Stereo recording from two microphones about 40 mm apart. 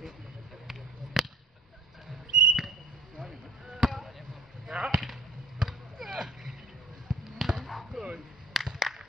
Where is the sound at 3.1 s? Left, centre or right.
Centre.